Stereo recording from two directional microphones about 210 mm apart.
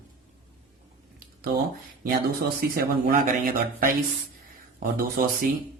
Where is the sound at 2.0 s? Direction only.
45° right (ahead or behind).